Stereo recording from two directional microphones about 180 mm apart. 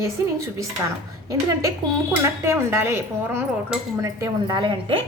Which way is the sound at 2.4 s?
15° right (ahead or behind).